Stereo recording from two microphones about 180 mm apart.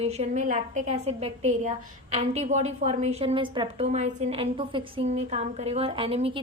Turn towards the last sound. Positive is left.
turn(degrees=-30)  # may be behind; listen again after turning